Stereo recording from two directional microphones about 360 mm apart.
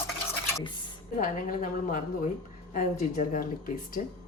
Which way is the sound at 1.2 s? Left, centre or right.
Left.